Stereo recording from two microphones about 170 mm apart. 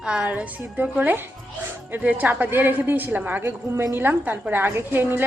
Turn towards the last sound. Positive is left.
turn(degrees=-10)  # may be behind; listen again after turning